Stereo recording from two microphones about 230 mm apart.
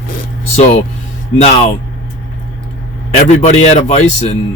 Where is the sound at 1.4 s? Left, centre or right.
Left.